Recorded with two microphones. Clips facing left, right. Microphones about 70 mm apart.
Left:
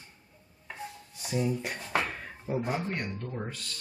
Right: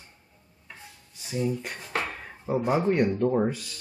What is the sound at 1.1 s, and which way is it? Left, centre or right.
Speech, centre.